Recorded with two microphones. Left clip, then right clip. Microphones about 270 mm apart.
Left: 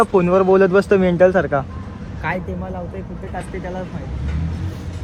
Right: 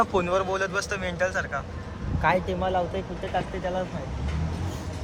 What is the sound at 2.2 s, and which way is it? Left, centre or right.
Speech, centre.